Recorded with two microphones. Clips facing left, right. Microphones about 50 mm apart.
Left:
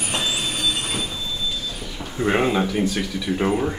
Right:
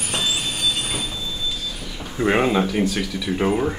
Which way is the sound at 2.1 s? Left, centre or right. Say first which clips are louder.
Right 1 dB; centre.